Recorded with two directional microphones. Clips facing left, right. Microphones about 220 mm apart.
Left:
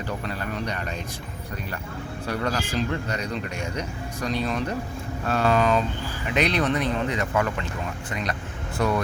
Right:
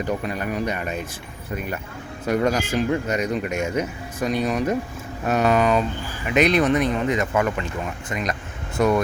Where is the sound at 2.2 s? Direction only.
10° right (ahead or behind).